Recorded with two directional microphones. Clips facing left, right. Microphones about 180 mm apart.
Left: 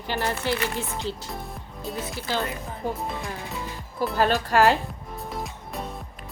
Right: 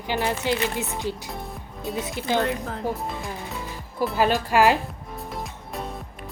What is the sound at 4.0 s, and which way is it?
Speech, centre (ahead or behind).